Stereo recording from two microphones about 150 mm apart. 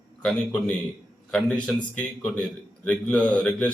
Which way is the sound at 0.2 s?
5° left (ahead or behind).